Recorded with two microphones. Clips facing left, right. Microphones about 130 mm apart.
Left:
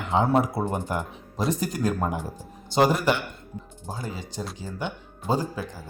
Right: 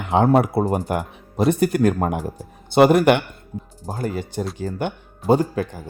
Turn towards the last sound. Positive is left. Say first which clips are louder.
# right 8 dB
turn(degrees=-60)  # may be behind; listen again after turning